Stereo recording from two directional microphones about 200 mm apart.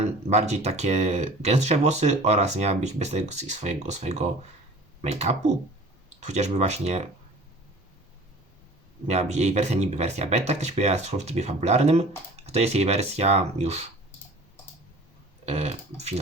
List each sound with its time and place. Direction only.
0.0 s speech: 35° right (ahead or behind)
6.1 s speech: 35° right (ahead or behind)
9.0 s speech: 35° right (ahead or behind)
15.4 s speech: 35° right (ahead or behind)